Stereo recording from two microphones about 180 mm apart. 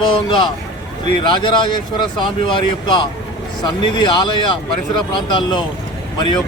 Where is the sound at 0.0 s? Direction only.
30° left (ahead or behind).